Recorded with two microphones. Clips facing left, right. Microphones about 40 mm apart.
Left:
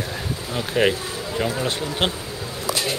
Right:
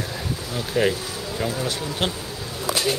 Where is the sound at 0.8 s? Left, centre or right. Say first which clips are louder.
Left 2 dB; left.